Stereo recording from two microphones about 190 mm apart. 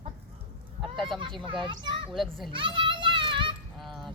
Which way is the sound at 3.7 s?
Centre (ahead or behind).